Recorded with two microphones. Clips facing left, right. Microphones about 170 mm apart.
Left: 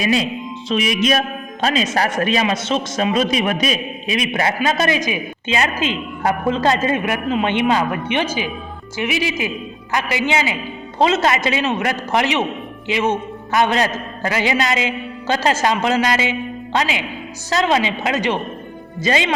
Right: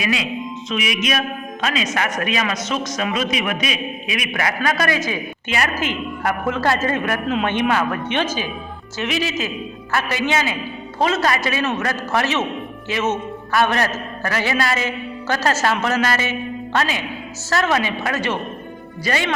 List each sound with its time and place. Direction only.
0.0 s music: 35° left (ahead or behind)
1.6 s a man's voice: 30° left (ahead or behind)